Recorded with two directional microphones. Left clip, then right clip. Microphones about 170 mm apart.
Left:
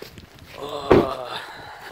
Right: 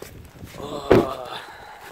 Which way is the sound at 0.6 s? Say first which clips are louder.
Left 1 dB; 10° left (ahead or behind).